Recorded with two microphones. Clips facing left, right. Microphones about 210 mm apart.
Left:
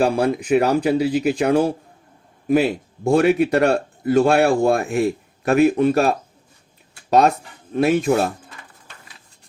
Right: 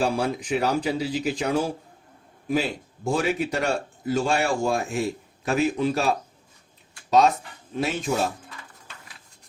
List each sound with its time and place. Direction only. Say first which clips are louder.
0.0 s speech: left 6 dB; 60° left (ahead or behind)